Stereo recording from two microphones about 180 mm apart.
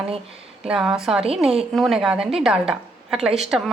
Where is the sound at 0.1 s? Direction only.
30° right (ahead or behind).